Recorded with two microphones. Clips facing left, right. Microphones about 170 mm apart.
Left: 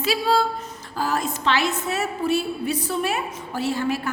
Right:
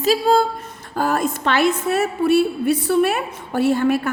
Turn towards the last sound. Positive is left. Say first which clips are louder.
# right 7 dB
turn(degrees=-55)  # may be behind; listen again after turning